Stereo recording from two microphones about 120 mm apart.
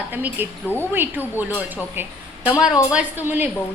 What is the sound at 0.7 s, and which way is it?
Speech, 15° left (ahead or behind).